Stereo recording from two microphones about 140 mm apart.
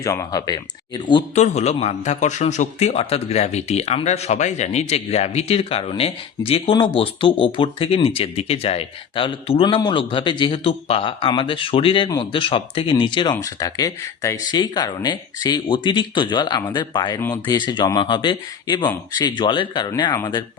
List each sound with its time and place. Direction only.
0.0 s speech: 25° left (ahead or behind)
1.4 s a man's voice: 50° left (ahead or behind); by 19.9 s 35° left (ahead or behind)
20.1 s speech: 20° left (ahead or behind)